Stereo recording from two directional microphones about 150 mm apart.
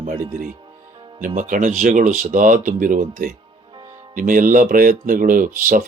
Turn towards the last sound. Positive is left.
turn(degrees=-65)  # may be behind; listen again after turning